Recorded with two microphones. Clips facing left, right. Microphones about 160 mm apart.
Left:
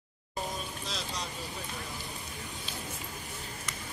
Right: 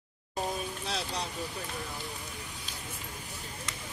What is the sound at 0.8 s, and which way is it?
Vehicle, 65° right (ahead or behind).